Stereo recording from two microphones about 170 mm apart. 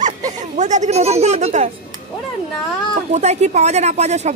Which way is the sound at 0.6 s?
45° right (ahead or behind).